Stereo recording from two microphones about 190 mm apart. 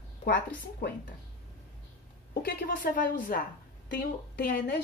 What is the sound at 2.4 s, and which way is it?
Speech, 50° left (ahead or behind).